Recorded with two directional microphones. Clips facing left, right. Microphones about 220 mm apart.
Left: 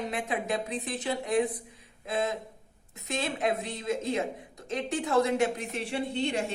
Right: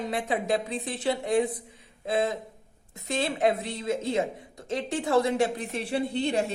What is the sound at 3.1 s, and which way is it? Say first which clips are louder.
A woman's voice: right 4 dB; 30° right (ahead or behind).